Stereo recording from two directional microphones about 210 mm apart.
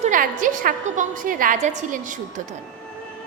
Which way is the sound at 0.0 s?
40° right (ahead or behind).